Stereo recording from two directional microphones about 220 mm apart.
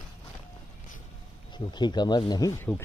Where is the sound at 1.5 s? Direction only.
20° left (ahead or behind).